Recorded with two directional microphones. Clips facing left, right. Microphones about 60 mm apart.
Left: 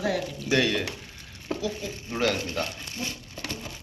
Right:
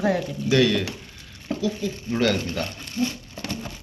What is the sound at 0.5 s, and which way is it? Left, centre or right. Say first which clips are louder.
Speech: right 4 dB; left.